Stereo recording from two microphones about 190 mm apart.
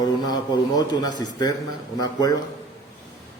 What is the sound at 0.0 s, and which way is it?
A man's voice, 20° left (ahead or behind).